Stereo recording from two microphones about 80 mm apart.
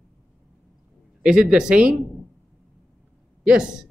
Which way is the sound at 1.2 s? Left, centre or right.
Centre.